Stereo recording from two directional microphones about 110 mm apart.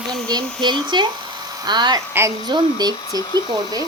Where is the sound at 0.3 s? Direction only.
40° right (ahead or behind).